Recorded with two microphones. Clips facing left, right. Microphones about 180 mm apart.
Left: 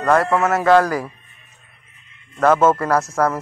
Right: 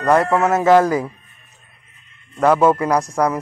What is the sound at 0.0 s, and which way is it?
Speech, 20° right (ahead or behind).